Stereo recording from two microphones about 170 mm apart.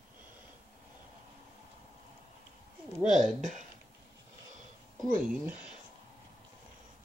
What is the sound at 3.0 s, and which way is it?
Speech, 45° right (ahead or behind).